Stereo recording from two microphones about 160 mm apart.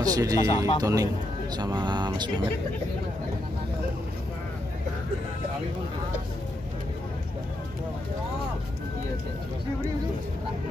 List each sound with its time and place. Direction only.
0.0 s speech: 20° right (ahead or behind)